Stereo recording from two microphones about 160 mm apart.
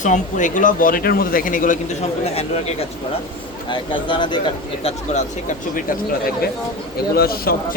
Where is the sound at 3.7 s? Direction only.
30° left (ahead or behind).